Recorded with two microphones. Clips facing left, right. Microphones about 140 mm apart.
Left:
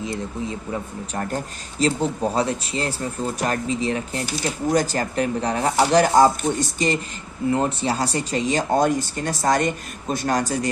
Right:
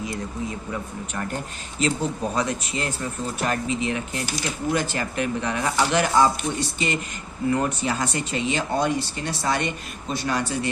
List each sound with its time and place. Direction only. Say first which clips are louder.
0.7 s speech: left 2 dB; 35° left (ahead or behind)
7.5 s speech: left 3 dB; 30° left (ahead or behind)